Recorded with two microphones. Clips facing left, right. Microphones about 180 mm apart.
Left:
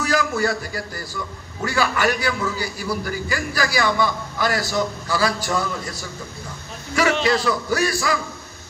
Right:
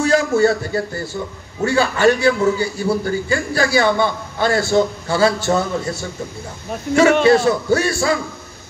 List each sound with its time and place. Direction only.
0.0 s a man's voice: 25° right (ahead or behind)
7.2 s a man's voice: 25° right (ahead or behind)